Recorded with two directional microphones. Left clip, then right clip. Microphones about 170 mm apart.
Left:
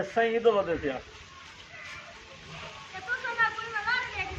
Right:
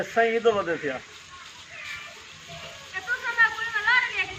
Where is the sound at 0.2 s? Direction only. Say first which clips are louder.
Right 2 dB; 40° right (ahead or behind).